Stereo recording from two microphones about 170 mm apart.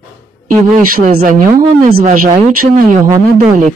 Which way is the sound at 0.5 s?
55° right (ahead or behind).